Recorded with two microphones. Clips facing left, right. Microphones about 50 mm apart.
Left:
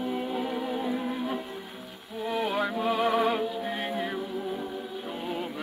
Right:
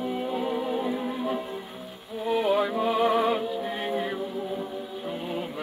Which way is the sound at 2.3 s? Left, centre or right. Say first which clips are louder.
Right 5 dB; centre.